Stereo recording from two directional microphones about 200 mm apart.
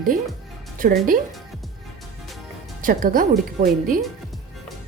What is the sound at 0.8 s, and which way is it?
Speech, 45° right (ahead or behind).